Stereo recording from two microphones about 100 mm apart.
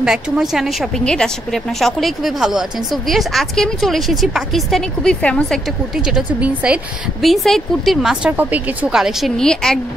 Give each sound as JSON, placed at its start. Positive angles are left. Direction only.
{"t": 0.0, "sound": "a woman's voice", "side_deg": -5}
{"t": 5.9, "sound": "a woman's voice", "side_deg": -5}
{"t": 7.2, "sound": "a woman's voice", "side_deg": 0}
{"t": 8.3, "sound": "a woman's voice", "side_deg": -15}
{"t": 8.9, "sound": "a woman's voice", "side_deg": -5}
{"t": 9.4, "sound": "a woman's voice", "side_deg": 5}